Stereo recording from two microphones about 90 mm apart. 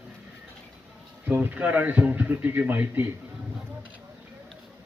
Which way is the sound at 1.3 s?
20° right (ahead or behind).